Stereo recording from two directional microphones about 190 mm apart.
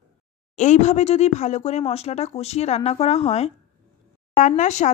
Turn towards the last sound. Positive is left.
turn(degrees=35)  # may be behind; listen again after turning